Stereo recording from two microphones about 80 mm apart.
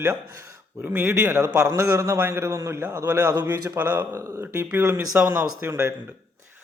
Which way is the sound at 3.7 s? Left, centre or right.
Right.